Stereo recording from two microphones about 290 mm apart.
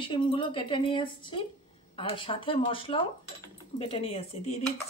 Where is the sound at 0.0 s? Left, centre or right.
Centre.